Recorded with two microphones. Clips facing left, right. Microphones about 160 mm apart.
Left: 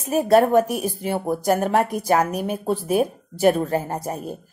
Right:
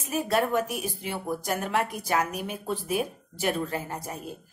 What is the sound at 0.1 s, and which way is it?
A woman's voice, 45° left (ahead or behind).